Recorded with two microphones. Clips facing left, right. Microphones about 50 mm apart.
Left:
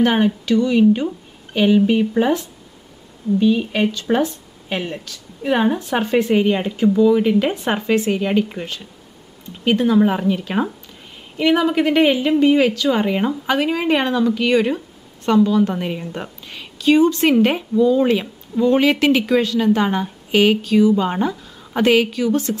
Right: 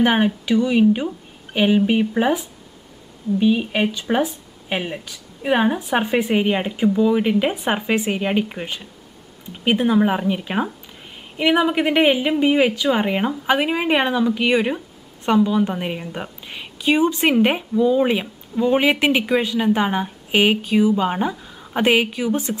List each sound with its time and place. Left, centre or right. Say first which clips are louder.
0.0 s a woman's voice: left 1 dB; centre